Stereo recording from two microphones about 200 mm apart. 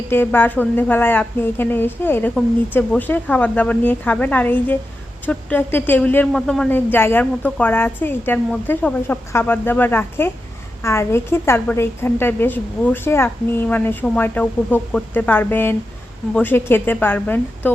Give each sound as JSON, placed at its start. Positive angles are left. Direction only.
{"t": 0.1, "sound": "a woman's voice", "side_deg": 10}